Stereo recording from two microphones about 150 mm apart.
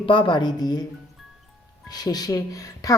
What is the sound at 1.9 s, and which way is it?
A woman's voice, 25° left (ahead or behind).